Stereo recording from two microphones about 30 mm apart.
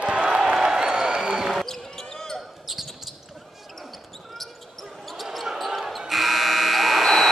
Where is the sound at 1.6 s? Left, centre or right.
Centre.